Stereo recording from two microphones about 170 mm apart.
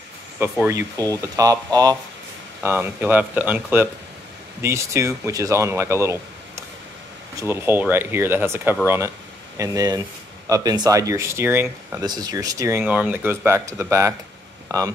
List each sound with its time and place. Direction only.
0.4 s speech: 15° right (ahead or behind)
12.0 s speech: 25° right (ahead or behind)